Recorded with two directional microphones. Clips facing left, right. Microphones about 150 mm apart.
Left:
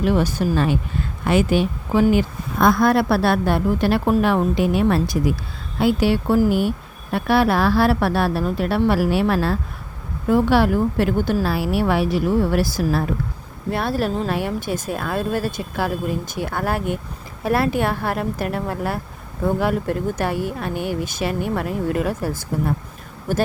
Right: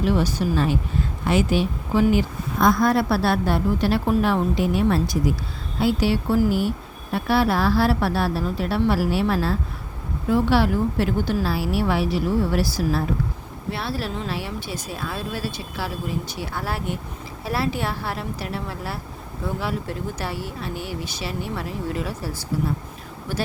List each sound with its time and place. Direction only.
0.1 s speech: 50° left (ahead or behind)
5.8 s speech: 55° left (ahead or behind)